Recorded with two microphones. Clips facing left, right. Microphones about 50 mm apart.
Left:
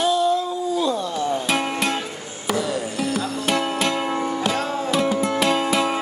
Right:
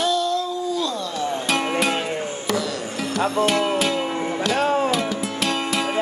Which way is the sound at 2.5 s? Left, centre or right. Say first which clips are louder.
Left 4 dB; centre.